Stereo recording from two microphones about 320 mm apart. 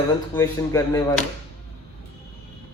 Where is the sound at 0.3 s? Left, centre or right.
Centre.